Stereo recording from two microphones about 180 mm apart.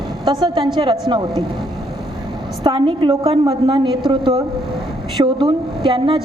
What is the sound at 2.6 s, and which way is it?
A woman's voice, 30° right (ahead or behind).